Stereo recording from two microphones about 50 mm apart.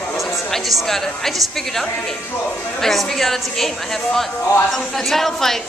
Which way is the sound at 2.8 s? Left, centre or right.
Centre.